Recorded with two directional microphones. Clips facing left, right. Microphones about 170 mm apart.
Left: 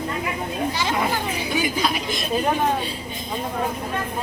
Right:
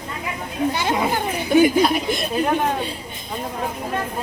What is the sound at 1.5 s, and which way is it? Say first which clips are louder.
Speech: right 10 dB; 55° right (ahead or behind).